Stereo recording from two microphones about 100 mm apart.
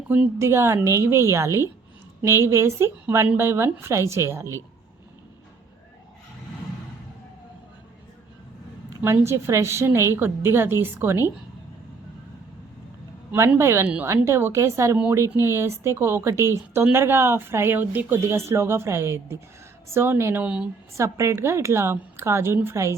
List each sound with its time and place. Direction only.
0.3 s speech: 25° right (ahead or behind)
9.0 s speech: 20° right (ahead or behind)
13.6 s speech: 25° right (ahead or behind)
20.4 s speech: 10° right (ahead or behind)
20.9 s speech: 30° right (ahead or behind)